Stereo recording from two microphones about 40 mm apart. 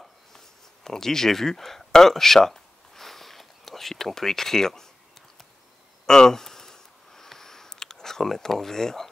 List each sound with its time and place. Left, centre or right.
0.8 s speech: centre
6.0 s speech: centre
6.4 s sniff: centre